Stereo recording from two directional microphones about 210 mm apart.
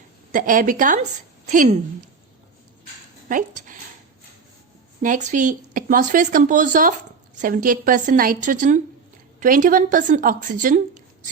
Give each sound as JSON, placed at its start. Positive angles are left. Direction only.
{"t": 0.3, "sound": "a woman's voice", "side_deg": -40}
{"t": 3.2, "sound": "speech", "side_deg": -40}
{"t": 5.0, "sound": "a woman's voice", "side_deg": -40}